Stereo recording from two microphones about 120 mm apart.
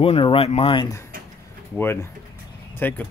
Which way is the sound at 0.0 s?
50° left (ahead or behind).